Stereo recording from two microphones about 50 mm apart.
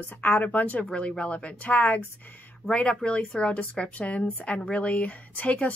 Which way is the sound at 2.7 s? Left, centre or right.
Centre.